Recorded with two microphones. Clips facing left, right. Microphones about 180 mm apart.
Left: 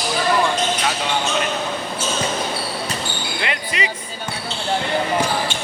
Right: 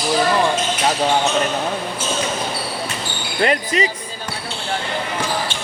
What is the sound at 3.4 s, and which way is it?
Speech, 40° right (ahead or behind).